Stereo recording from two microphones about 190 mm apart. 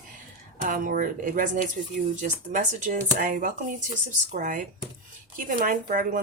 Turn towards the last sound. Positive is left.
turn(degrees=-45)  # may be behind; listen again after turning